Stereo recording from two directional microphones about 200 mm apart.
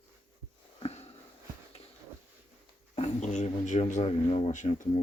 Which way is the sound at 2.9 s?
35° left (ahead or behind).